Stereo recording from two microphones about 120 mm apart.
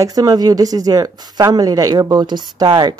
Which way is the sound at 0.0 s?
30° right (ahead or behind).